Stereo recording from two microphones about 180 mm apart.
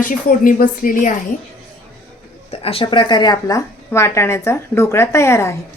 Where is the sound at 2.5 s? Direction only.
30° left (ahead or behind); by 5.6 s 15° left (ahead or behind).